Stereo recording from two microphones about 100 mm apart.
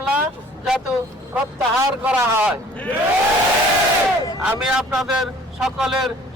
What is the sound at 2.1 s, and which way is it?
Speech, 20° right (ahead or behind).